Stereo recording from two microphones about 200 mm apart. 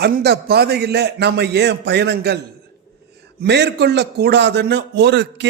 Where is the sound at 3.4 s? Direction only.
60° right (ahead or behind).